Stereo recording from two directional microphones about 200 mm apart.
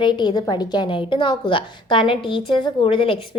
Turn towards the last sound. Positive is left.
turn(degrees=25)  # may be behind; listen again after turning